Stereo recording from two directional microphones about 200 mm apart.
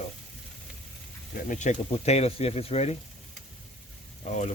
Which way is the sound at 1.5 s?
35° left (ahead or behind).